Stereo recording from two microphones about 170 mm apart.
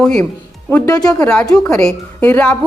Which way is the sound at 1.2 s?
5° left (ahead or behind).